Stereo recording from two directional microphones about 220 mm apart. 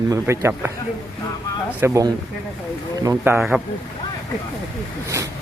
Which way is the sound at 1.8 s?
15° right (ahead or behind).